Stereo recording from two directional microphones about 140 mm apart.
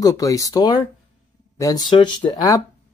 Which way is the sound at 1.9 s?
35° left (ahead or behind).